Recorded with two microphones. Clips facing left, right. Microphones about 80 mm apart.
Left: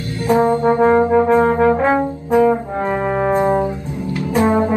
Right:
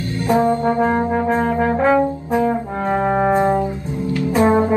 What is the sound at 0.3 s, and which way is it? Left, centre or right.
Brass instrument, left.